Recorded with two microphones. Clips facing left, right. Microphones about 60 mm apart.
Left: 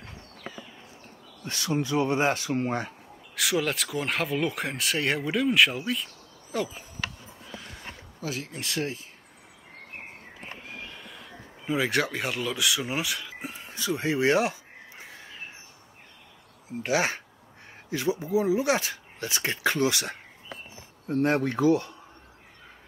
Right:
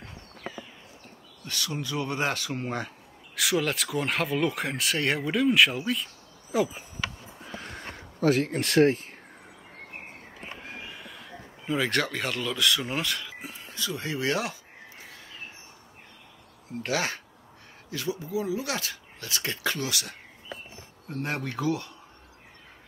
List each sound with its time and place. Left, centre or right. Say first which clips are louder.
1.4 s speech: left 5 dB; left
3.3 s speech: even; centre
7.4 s a sound: right 3 dB; right
10.9 s a sound: right 1 dB; centre
11.6 s speech: left 1 dB; centre
13.4 s speech: left 1 dB; left
16.8 s speech: left 3 dB; centre